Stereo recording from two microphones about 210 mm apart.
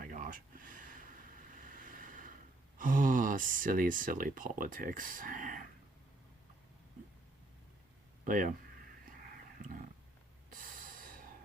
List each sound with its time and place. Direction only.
0.0 s a sound: 40° right (ahead or behind)
1.7 s boat: 40° right (ahead or behind)
2.7 s speech: 40° right (ahead or behind)
8.2 s speech: 40° right (ahead or behind)
10.5 s snort: 40° right (ahead or behind)